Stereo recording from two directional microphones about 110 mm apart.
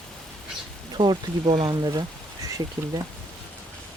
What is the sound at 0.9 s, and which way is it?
Speech, 45° right (ahead or behind).